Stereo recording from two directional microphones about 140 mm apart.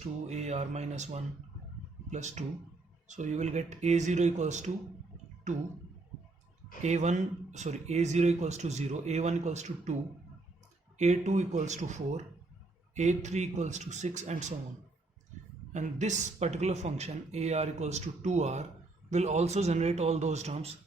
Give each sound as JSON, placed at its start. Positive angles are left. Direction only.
{"t": 0.0, "sound": "speech", "side_deg": -50}
{"t": 6.8, "sound": "speech", "side_deg": -60}
{"t": 10.9, "sound": "speech", "side_deg": -55}
{"t": 15.7, "sound": "speech", "side_deg": -60}